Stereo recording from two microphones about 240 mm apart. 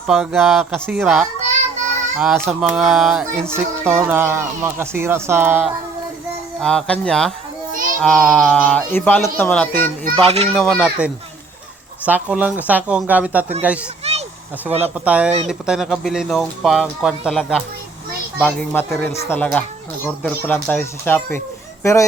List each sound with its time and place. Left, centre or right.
0.1 s speech: centre
6.6 s speech: centre
10.2 s speech: right
10.5 s speech: centre
14.0 s a sound: right
14.7 s speech: right
14.9 s speech: centre